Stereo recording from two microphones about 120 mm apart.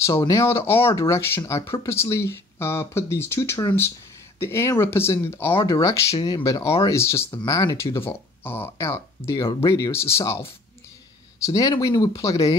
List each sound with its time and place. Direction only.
0.0 s speech: 25° left (ahead or behind)